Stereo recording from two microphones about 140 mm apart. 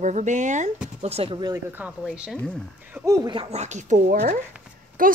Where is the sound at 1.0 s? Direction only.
45° right (ahead or behind).